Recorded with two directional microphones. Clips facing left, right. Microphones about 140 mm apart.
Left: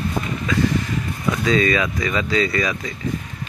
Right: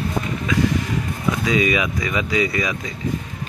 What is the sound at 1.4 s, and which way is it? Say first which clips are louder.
Speech: left 2 dB; 15° right (ahead or behind).